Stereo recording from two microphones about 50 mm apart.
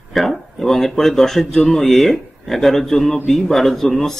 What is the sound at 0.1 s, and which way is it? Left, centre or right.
Speech, centre.